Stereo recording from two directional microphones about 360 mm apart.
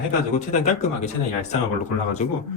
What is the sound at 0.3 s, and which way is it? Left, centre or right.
Speech, centre.